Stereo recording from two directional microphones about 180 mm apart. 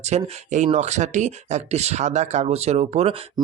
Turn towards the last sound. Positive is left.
turn(degrees=-35)  # may be behind; listen again after turning